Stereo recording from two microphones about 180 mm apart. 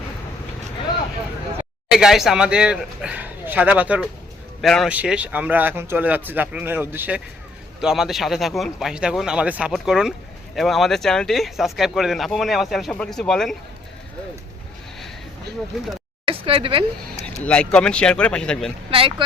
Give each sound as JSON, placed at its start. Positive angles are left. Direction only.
{"t": 1.9, "sound": "speech", "side_deg": 0}
{"t": 16.2, "sound": "a sound", "side_deg": -30}
{"t": 17.2, "sound": "speech", "side_deg": 5}
{"t": 18.9, "sound": "speech", "side_deg": -30}